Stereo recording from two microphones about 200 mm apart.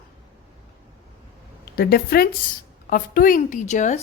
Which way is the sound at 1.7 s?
50° left (ahead or behind).